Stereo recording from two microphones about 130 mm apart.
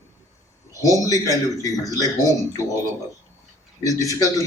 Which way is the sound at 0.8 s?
25° left (ahead or behind).